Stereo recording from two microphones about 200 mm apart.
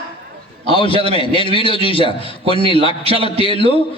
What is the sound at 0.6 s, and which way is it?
A man's voice, 25° left (ahead or behind).